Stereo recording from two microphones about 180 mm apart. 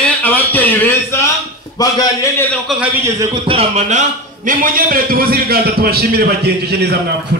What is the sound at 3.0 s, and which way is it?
A man's voice, 20° right (ahead or behind).